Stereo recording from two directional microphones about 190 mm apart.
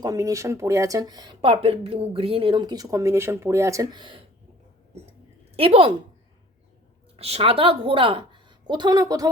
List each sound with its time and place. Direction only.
0.0 s speech: 20° right (ahead or behind)
5.5 s speech: 30° right (ahead or behind)
7.2 s a woman's voice: 35° right (ahead or behind)